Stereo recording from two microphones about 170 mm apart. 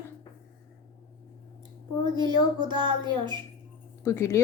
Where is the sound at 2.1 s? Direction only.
25° right (ahead or behind).